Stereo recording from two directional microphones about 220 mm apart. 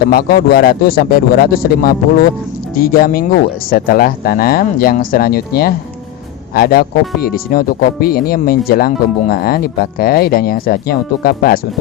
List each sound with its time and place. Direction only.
0.1 s speech: 45° left (ahead or behind)